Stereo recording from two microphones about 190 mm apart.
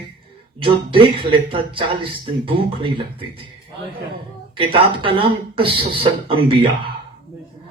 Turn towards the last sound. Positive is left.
turn(degrees=-30)  # may be behind; listen again after turning